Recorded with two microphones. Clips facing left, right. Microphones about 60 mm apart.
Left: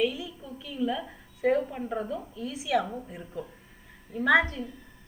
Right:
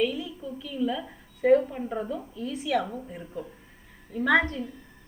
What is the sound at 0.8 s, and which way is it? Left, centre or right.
Speech, centre.